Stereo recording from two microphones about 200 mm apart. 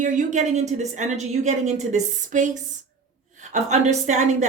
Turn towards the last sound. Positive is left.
turn(degrees=-35)  # may be behind; listen again after turning